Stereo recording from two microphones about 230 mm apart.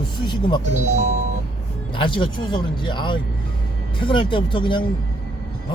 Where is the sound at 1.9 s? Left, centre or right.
Left.